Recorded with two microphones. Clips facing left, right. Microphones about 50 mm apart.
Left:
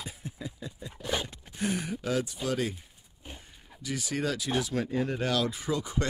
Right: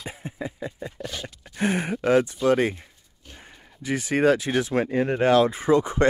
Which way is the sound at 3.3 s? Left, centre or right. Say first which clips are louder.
Right 7 dB; right.